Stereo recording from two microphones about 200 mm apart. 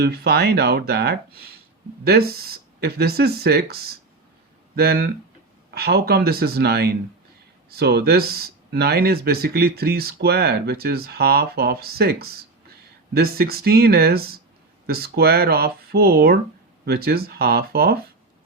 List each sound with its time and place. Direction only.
0.0 s speech: 50° right (ahead or behind)